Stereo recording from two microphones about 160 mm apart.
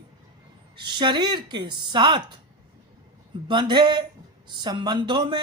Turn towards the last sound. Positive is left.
turn(degrees=-30)  # may be behind; listen again after turning